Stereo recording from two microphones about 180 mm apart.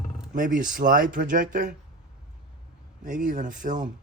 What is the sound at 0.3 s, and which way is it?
Speech, 45° right (ahead or behind).